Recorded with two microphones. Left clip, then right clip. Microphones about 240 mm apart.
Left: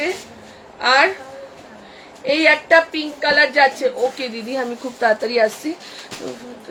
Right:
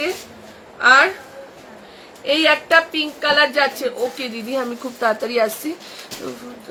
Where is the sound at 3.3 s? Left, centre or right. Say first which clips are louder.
Left 3 dB; centre.